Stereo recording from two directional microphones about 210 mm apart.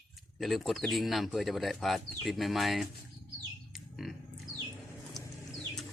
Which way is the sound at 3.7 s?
Centre (ahead or behind).